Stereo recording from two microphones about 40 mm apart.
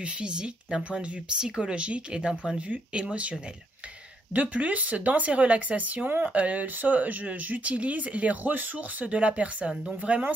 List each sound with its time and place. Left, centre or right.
0.0 s speech: right
4.3 s speech: right